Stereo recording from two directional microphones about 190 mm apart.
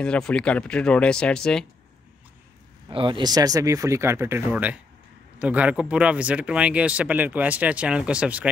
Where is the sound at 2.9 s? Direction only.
25° right (ahead or behind).